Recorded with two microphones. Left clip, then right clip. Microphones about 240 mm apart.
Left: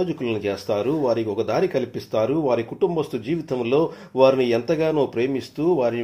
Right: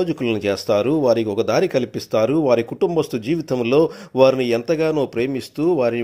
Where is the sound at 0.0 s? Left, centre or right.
Right.